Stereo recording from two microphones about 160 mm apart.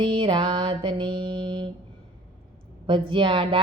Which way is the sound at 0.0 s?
30° right (ahead or behind).